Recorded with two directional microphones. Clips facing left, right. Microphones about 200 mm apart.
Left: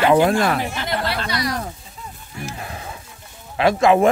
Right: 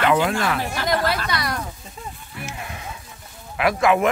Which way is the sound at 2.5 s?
35° left (ahead or behind).